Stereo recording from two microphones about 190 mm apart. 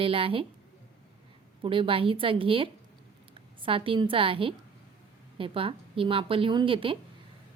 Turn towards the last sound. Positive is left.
turn(degrees=-25)  # may be behind; listen again after turning